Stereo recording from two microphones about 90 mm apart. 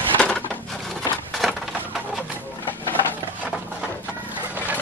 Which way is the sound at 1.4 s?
Centre (ahead or behind).